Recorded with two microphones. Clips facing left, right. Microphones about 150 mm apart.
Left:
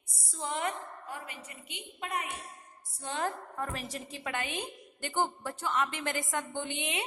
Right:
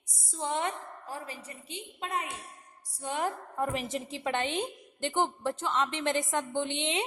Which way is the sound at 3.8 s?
25° right (ahead or behind).